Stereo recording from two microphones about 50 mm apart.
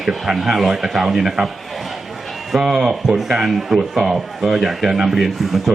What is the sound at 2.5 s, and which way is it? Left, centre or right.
Speech, centre.